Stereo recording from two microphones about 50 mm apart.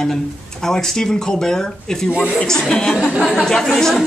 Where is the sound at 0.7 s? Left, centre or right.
Centre.